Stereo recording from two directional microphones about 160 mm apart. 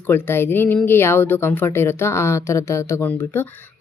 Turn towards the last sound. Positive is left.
turn(degrees=15)  # may be behind; listen again after turning